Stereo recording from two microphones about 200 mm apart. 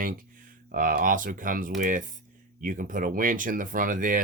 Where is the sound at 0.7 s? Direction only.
45° right (ahead or behind).